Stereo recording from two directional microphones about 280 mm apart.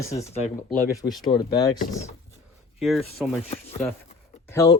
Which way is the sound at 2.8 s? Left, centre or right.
Centre.